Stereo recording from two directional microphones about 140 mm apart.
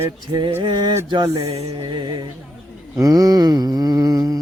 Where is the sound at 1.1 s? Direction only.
25° right (ahead or behind).